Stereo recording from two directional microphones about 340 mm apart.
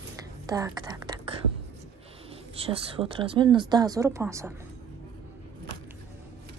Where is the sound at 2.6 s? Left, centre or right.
Centre.